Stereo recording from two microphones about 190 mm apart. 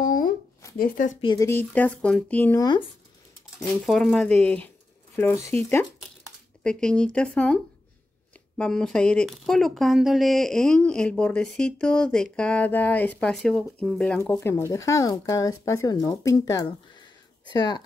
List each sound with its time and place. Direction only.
0.0 s a sound: 45° left (ahead or behind)
0.7 s speech: 45° left (ahead or behind)
1.2 s speech: 20° left (ahead or behind)
3.8 s speech: centre (ahead or behind); by 17.8 s 20° left (ahead or behind)